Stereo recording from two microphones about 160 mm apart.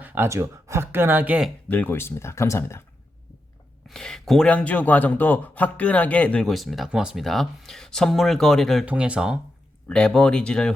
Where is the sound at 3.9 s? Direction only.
5° left (ahead or behind).